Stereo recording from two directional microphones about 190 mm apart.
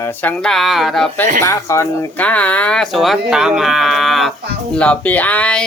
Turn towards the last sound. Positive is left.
turn(degrees=5)  # may be behind; listen again after turning